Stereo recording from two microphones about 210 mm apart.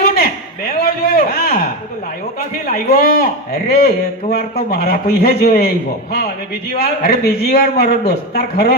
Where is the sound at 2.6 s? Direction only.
45° left (ahead or behind).